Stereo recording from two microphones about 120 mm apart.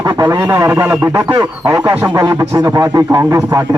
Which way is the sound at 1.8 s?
15° right (ahead or behind).